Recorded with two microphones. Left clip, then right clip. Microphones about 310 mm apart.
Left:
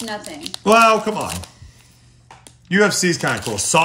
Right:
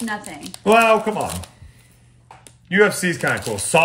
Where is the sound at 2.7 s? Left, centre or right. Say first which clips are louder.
Even; centre.